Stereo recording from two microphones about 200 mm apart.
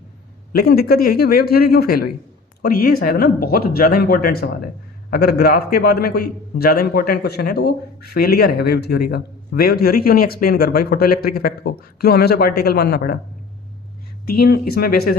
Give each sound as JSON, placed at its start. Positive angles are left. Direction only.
{"t": 0.5, "sound": "a man's voice", "side_deg": 50}
{"t": 14.3, "sound": "a man's voice", "side_deg": 50}